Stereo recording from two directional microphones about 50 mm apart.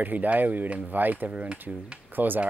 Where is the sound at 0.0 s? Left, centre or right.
Right.